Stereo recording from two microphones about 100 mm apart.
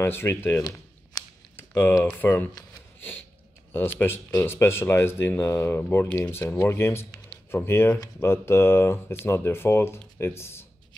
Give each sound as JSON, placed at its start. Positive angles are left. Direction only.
{"t": 0.0, "sound": "speech", "side_deg": 25}
{"t": 1.6, "sound": "a sound", "side_deg": 25}
{"t": 2.0, "sound": "speech", "side_deg": 20}
{"t": 3.7, "sound": "speech", "side_deg": 20}